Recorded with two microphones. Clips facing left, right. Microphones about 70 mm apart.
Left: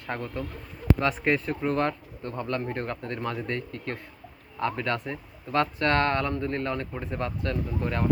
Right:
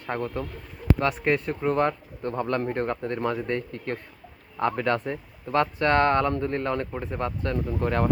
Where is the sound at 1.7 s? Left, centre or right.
Right.